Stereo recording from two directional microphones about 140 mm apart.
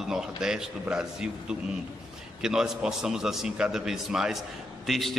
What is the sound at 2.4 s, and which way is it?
A man's voice, 5° right (ahead or behind).